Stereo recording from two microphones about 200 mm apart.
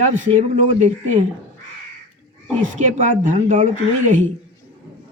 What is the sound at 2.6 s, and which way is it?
Speech, 40° right (ahead or behind).